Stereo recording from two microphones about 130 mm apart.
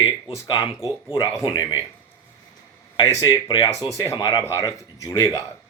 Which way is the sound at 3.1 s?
30° left (ahead or behind).